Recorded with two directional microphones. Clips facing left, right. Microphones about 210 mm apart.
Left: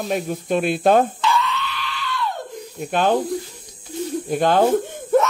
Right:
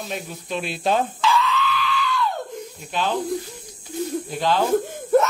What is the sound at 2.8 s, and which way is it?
Speech, 50° left (ahead or behind).